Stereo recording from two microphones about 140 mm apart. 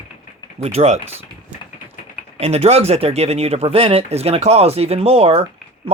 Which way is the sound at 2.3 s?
50° right (ahead or behind).